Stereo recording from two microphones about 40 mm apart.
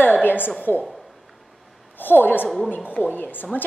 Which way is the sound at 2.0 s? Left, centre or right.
Left.